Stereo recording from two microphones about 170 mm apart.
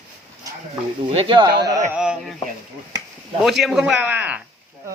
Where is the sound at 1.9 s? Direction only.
5° right (ahead or behind).